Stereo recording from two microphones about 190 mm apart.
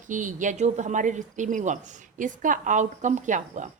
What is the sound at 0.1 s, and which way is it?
Speech, 40° right (ahead or behind).